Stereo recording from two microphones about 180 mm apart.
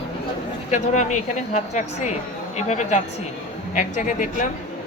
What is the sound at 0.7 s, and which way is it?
A man's voice, 40° left (ahead or behind).